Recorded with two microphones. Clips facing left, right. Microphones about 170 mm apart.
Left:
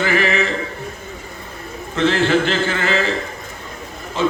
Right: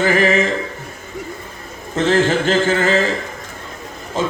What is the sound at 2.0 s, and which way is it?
A man's voice, 45° right (ahead or behind).